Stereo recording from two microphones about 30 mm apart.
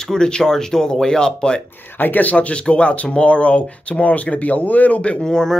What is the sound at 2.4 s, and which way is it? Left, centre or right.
Speech, left.